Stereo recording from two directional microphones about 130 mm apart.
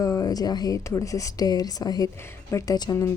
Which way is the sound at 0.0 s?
30° left (ahead or behind).